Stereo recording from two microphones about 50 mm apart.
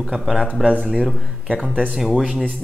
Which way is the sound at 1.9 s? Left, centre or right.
Centre.